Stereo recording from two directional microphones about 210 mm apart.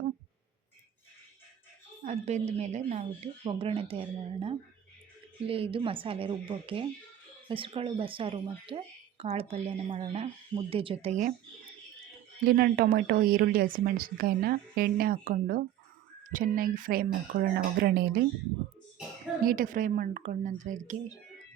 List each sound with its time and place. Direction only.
2.0 s a woman's voice: 30° right (ahead or behind)
12.5 s speech: 45° right (ahead or behind)
19.5 s speech: 40° right (ahead or behind)